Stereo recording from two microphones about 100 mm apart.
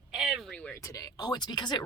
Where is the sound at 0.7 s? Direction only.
35° left (ahead or behind).